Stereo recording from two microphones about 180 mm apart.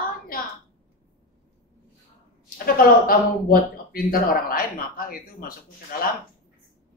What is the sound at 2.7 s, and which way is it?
Speech, 55° left (ahead or behind).